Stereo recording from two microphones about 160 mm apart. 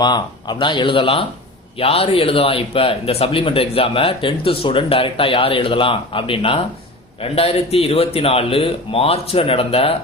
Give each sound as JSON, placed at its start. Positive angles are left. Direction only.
{"t": 0.0, "sound": "speech", "side_deg": 25}